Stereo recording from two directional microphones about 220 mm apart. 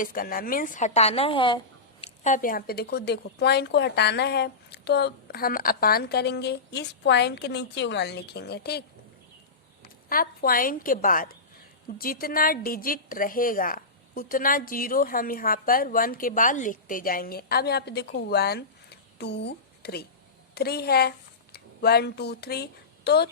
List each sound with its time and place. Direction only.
0.0 s speech: 40° left (ahead or behind)
10.1 s a woman's voice: 40° left (ahead or behind)